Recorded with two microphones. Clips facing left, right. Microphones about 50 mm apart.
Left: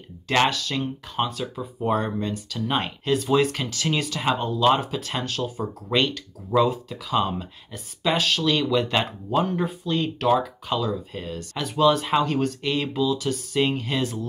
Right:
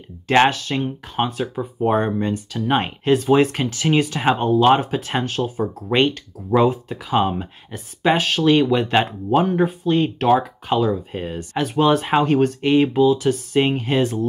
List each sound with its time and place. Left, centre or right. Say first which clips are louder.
0.3 s speech: right 6 dB; right